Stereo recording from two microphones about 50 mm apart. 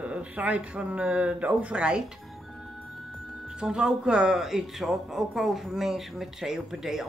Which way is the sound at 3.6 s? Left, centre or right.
Centre.